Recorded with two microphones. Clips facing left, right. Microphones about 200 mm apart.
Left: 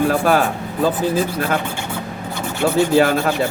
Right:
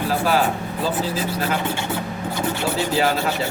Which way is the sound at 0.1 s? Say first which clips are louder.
Left 4 dB; 50° left (ahead or behind).